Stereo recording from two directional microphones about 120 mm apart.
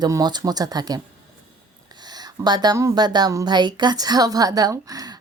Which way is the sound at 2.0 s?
35° right (ahead or behind).